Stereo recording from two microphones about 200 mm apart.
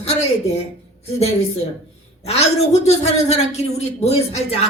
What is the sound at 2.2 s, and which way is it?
Speech, 30° left (ahead or behind).